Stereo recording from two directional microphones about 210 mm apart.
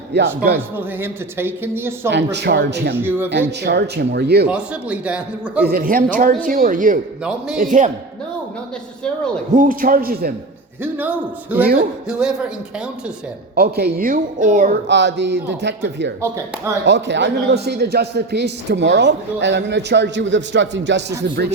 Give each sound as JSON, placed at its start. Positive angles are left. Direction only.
{"t": 0.1, "sound": "speech", "side_deg": -50}
{"t": 0.8, "sound": "speech", "side_deg": -10}
{"t": 2.0, "sound": "speech", "side_deg": -55}
{"t": 2.9, "sound": "speech", "side_deg": -10}
{"t": 3.6, "sound": "speech", "side_deg": -50}
{"t": 4.4, "sound": "a man's voice", "side_deg": -5}
{"t": 5.6, "sound": "a woman's voice", "side_deg": -45}
{"t": 7.3, "sound": "a man's voice", "side_deg": -5}
{"t": 7.6, "sound": "a woman's voice", "side_deg": -40}
{"t": 9.6, "sound": "speech", "side_deg": -40}
{"t": 10.9, "sound": "a man's voice", "side_deg": -10}
{"t": 13.6, "sound": "a woman's voice", "side_deg": -50}
{"t": 14.8, "sound": "a man's voice", "side_deg": -55}